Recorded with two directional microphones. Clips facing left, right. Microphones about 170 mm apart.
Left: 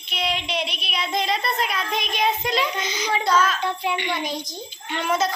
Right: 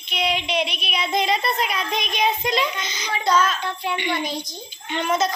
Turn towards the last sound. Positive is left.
turn(degrees=5)  # may be behind; listen again after turning